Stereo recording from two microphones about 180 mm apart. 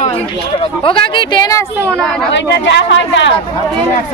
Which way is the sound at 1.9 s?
5° left (ahead or behind).